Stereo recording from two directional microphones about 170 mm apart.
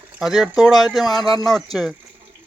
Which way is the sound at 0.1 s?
5° right (ahead or behind).